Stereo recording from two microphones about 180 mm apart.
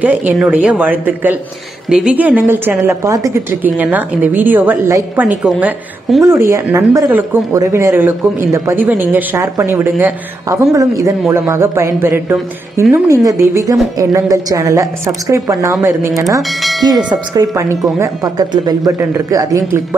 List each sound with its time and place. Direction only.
0.0 s a woman's voice: 10° right (ahead or behind)
6.5 s a woman's voice: 15° right (ahead or behind)